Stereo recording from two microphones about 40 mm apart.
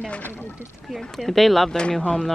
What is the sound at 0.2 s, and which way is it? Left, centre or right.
Speech, left.